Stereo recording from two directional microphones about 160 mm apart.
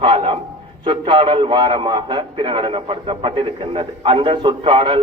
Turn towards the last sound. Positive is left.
turn(degrees=-30)  # may be behind; listen again after turning